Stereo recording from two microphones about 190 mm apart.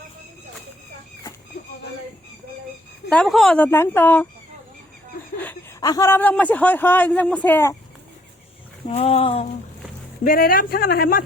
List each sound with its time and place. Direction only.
3.1 s a man's voice: 5° left (ahead or behind)
5.8 s a man's voice: 20° left (ahead or behind)
8.9 s a sound: 30° left (ahead or behind)
10.2 s speech: 50° left (ahead or behind)